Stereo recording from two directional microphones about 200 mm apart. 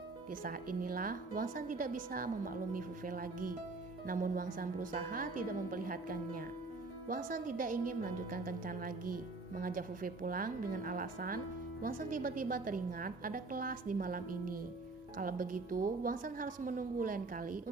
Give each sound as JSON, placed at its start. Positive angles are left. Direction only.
{"t": 0.3, "sound": "a woman's voice", "side_deg": -45}